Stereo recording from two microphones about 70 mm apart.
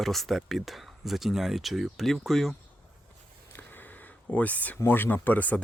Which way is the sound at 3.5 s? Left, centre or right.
Left.